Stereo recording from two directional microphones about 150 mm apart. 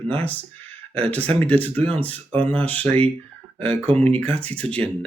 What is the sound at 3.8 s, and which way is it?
Speech, 40° right (ahead or behind).